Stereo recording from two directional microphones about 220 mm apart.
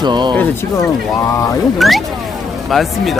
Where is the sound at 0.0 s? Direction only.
20° right (ahead or behind).